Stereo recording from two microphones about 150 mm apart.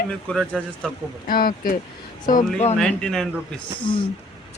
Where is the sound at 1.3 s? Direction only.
75° left (ahead or behind).